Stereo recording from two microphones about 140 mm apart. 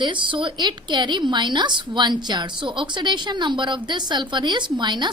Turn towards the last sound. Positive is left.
turn(degrees=-35)  # may be behind; listen again after turning